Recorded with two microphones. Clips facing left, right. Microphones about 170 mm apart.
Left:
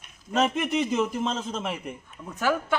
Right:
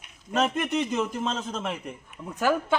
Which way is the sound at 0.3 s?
Centre (ahead or behind).